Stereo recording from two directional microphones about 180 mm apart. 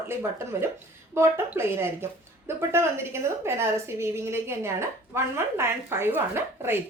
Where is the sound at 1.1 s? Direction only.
15° right (ahead or behind).